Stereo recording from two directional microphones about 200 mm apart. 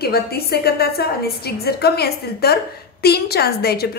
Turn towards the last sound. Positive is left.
turn(degrees=50)  # may be behind; listen again after turning